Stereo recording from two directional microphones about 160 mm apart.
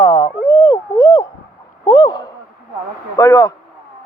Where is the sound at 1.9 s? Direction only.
25° left (ahead or behind).